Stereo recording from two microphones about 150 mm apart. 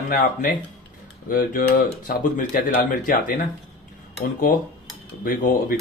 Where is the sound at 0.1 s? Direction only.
60° left (ahead or behind).